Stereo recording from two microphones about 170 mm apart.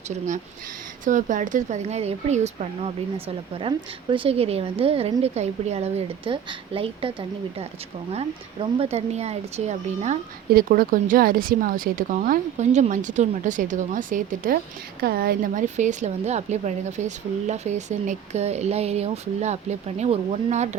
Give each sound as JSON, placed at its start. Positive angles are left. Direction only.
{"t": 1.0, "sound": "speech", "side_deg": -50}
{"t": 3.6, "sound": "speech", "side_deg": -30}
{"t": 10.5, "sound": "speech", "side_deg": -60}
{"t": 15.0, "sound": "speech", "side_deg": -65}
{"t": 15.6, "sound": "speech", "side_deg": -45}